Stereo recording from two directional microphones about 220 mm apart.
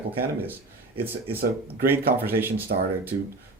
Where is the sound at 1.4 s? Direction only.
45° right (ahead or behind).